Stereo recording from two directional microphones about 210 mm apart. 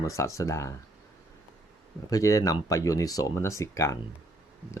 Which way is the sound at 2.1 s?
15° left (ahead or behind).